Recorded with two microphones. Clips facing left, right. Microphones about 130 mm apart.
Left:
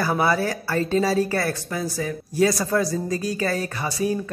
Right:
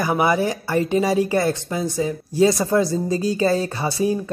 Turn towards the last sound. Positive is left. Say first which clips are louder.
# right 3 dB
turn(degrees=-30)  # may be behind; listen again after turning